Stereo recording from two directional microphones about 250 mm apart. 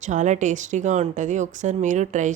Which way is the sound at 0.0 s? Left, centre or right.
Right.